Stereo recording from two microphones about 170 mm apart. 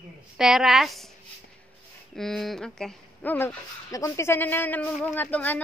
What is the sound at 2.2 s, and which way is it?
Speech, centre (ahead or behind).